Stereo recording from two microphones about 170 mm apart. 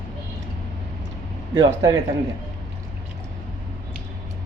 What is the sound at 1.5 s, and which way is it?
Speech, 20° right (ahead or behind).